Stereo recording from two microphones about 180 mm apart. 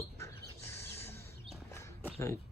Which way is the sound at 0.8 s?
15° left (ahead or behind).